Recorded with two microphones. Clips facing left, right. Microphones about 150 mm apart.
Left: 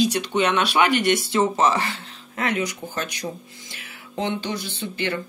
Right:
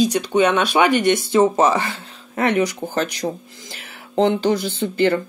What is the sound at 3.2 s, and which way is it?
Speech, 45° right (ahead or behind).